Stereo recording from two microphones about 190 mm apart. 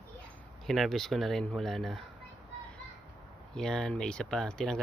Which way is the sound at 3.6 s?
5° left (ahead or behind).